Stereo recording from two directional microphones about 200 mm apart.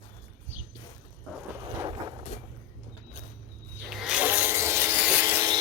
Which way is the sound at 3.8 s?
5° right (ahead or behind).